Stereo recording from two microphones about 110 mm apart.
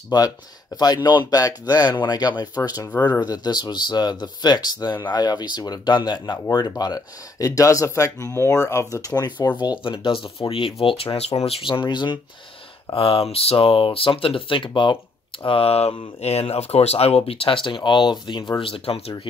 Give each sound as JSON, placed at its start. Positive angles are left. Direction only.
{"t": 0.1, "sound": "speech", "side_deg": 40}
{"t": 11.4, "sound": "speech", "side_deg": 50}
{"t": 12.9, "sound": "speech", "side_deg": 65}
{"t": 15.4, "sound": "speech", "side_deg": 60}
{"t": 18.6, "sound": "speech", "side_deg": 55}